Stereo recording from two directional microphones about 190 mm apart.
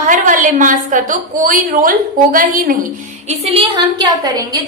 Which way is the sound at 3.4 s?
30° right (ahead or behind).